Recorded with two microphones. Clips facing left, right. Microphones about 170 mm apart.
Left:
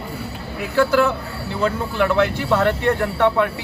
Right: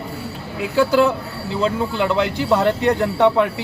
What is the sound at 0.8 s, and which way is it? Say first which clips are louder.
Speech: right 1 dB; 15° right (ahead or behind).